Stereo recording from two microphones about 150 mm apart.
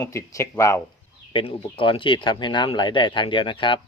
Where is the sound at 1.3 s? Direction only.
35° left (ahead or behind).